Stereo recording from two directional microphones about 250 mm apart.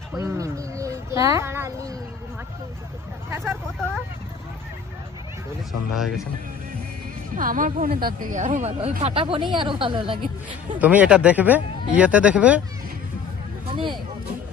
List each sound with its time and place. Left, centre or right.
0.2 s a sound: centre
3.2 s vehicle: centre
5.9 s speech: centre
7.3 s speech: right
10.8 s speech: centre
13.7 s a sound: centre